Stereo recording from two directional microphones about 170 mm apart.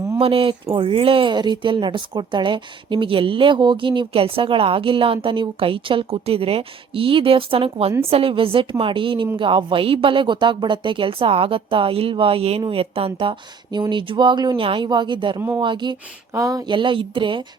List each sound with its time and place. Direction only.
0.2 s speech: 35° right (ahead or behind)